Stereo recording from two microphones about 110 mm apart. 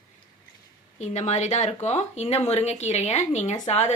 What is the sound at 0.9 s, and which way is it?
Speech, 90° left.